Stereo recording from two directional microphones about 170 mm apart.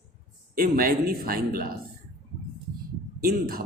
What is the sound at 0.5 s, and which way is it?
Speech, 60° right (ahead or behind).